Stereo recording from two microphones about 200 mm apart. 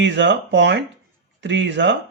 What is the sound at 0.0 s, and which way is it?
A man's voice, 60° right (ahead or behind).